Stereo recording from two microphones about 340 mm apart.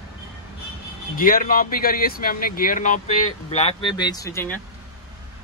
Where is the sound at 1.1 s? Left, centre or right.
Left; by 4.6 s centre.